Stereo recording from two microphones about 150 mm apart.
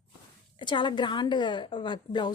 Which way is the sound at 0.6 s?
30° left (ahead or behind).